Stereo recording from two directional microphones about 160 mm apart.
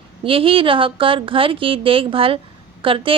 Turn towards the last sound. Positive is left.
turn(degrees=-35)  # may be behind; listen again after turning